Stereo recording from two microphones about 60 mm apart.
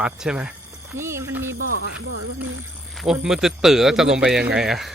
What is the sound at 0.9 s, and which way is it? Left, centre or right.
Speech, right.